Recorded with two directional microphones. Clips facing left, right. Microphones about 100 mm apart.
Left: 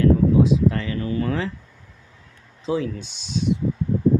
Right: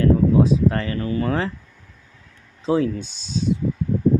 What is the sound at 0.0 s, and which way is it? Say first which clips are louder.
Speech: even; 40° right (ahead or behind).